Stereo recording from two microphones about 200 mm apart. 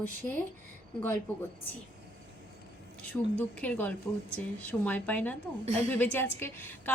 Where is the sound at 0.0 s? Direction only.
10° left (ahead or behind).